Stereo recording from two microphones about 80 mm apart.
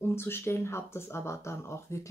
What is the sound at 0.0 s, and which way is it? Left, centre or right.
Speech, left.